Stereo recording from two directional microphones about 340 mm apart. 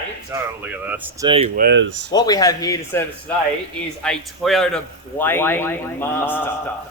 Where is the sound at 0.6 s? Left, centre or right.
Centre; by 2.1 s right.